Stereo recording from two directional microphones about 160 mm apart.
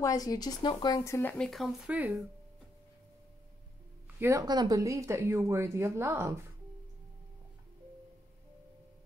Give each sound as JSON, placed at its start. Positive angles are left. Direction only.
{"t": 0.0, "sound": "speech", "side_deg": 25}
{"t": 1.4, "sound": "speech", "side_deg": 0}
{"t": 4.2, "sound": "speech", "side_deg": -20}